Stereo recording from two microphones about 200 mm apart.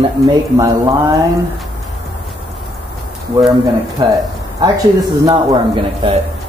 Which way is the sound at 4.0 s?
20° right (ahead or behind).